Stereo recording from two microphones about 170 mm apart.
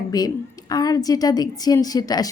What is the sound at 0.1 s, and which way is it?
Speech, 20° left (ahead or behind).